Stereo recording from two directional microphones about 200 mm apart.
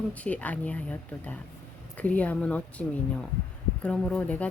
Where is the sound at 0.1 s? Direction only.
5° left (ahead or behind).